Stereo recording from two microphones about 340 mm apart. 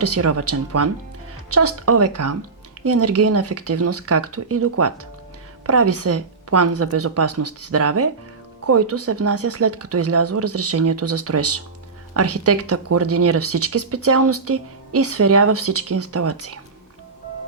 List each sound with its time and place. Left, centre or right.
0.0 s speech: right